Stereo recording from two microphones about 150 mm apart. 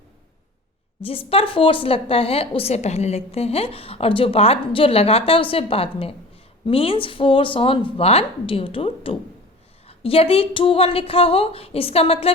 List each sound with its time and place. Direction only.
1.0 s a woman's voice: 40° left (ahead or behind)